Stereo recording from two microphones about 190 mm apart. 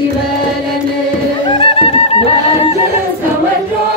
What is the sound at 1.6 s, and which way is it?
Music, 30° left (ahead or behind).